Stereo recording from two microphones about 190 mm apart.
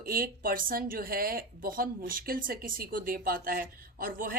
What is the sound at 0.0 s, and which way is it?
Speech, 50° right (ahead or behind).